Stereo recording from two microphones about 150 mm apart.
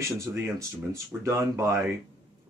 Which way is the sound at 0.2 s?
20° right (ahead or behind).